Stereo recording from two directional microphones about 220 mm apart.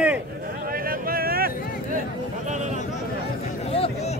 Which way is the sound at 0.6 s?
40° right (ahead or behind).